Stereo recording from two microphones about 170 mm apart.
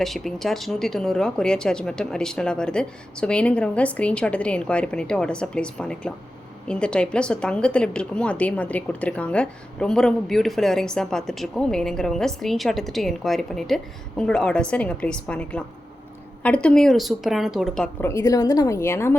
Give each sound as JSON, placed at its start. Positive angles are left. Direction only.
{"t": 0.0, "sound": "a woman's voice", "side_deg": 0}
{"t": 18.0, "sound": "a woman's voice", "side_deg": 20}